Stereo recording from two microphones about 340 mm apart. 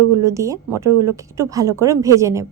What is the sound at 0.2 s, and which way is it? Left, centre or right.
A woman's voice, centre.